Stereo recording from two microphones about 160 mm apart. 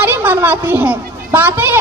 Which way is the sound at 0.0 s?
10° right (ahead or behind).